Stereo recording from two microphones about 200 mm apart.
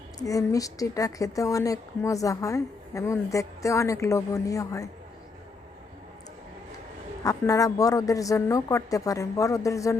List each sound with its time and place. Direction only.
0.2 s speech: 15° left (ahead or behind)
7.3 s speech: 15° left (ahead or behind)